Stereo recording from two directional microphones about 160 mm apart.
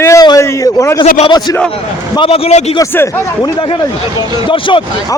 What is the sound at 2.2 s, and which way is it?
Speech, 40° left (ahead or behind).